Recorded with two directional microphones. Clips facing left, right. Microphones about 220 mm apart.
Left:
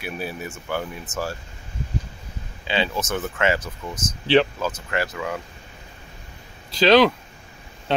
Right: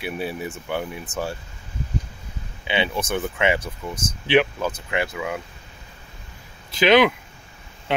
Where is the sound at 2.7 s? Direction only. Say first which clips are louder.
Right 1 dB; 20° right (ahead or behind).